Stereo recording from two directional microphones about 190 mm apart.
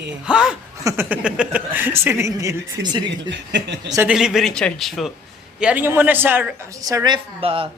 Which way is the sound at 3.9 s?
10° right (ahead or behind).